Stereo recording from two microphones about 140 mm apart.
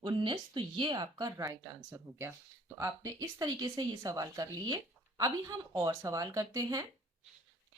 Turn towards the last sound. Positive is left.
turn(degrees=-25)  # may be behind; listen again after turning